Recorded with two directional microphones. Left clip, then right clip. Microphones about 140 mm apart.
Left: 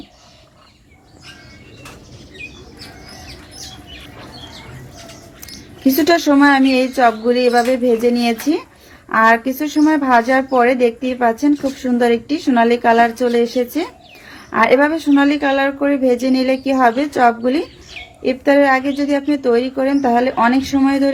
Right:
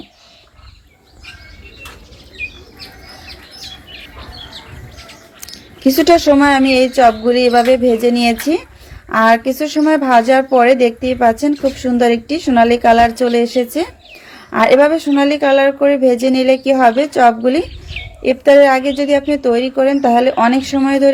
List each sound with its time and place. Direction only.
5.4 s speech: 45° right (ahead or behind)